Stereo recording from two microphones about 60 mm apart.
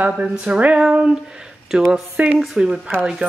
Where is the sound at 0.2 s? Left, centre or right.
Centre.